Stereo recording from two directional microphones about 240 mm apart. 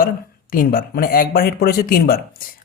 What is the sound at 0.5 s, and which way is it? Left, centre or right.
Speech, left.